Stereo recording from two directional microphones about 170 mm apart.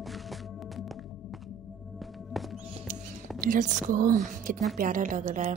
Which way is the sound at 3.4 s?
50° right (ahead or behind).